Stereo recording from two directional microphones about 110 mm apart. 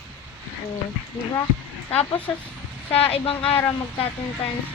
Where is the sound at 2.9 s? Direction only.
60° left (ahead or behind).